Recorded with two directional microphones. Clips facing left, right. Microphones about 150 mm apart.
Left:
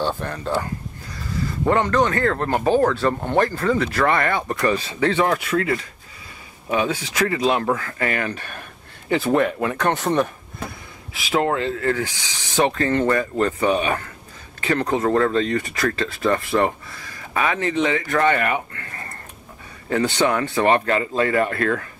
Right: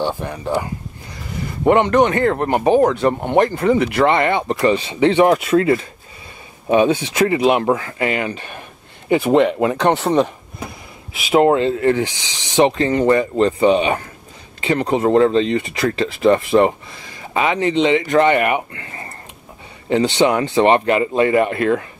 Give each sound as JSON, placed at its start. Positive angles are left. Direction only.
{"t": 0.0, "sound": "speech", "side_deg": -15}
{"t": 11.1, "sound": "speech", "side_deg": -20}